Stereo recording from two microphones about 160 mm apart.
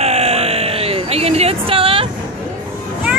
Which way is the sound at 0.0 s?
40° right (ahead or behind).